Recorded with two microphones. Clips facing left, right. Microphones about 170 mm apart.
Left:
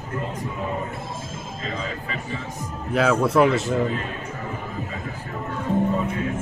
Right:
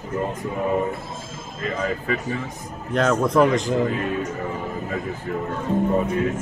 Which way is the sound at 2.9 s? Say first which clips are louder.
Even; 5° left (ahead or behind).